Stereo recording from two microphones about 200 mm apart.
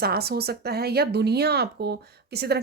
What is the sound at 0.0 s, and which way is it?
Speech, 50° right (ahead or behind).